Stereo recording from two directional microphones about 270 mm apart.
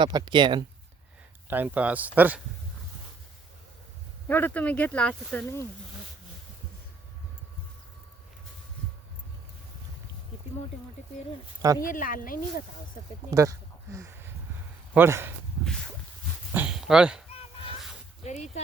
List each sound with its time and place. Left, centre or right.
0.0 s speech: centre
1.5 s speech: centre
4.3 s speech: centre
11.8 s speech: left
13.3 s speech: centre
15.6 s a sound: centre
16.6 s speech: centre
17.3 s fowl: left
18.2 s speech: left